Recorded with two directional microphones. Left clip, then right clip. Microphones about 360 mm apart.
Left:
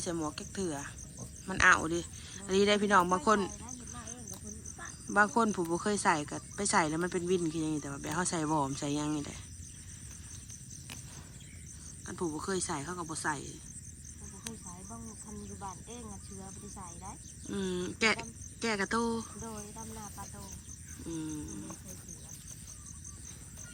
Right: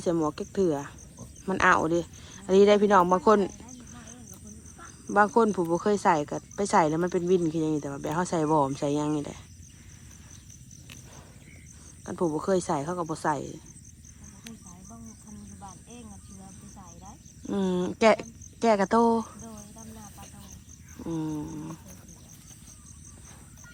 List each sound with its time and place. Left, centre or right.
0.0 s speech: centre
12.0 s speech: centre
15.6 s a sound: centre
17.5 s a woman's voice: centre
19.7 s snake: centre
21.0 s speech: centre